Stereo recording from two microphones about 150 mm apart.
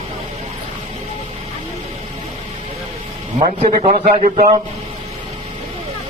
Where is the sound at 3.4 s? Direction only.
40° right (ahead or behind).